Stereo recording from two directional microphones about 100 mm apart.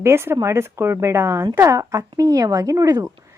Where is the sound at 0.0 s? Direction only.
25° right (ahead or behind).